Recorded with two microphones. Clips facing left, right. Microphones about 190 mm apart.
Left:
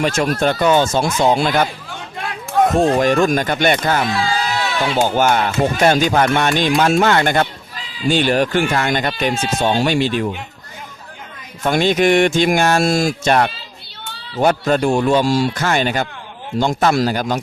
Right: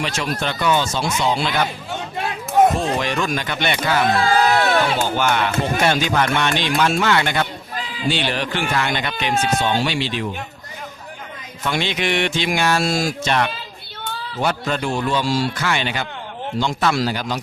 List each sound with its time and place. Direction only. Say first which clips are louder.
0.0 s speech: left 7 dB; 45° left (ahead or behind)
1.9 s a sound: right 3 dB; 25° right (ahead or behind)
2.8 s speech: left 8 dB; 45° left (ahead or behind)
4.0 s a sound: right 3 dB; 55° right (ahead or behind)
5.0 s speech: left 4 dB; 45° left (ahead or behind)
11.6 s speech: left 8 dB; 45° left (ahead or behind)